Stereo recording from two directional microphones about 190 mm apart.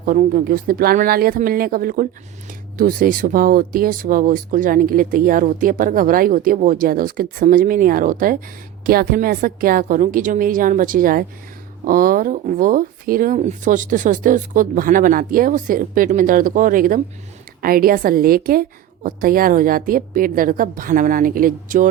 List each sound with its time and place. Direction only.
0.0 s speech: 45° right (ahead or behind)